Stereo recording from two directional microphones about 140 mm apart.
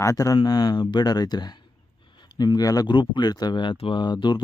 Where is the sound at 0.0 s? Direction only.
25° left (ahead or behind).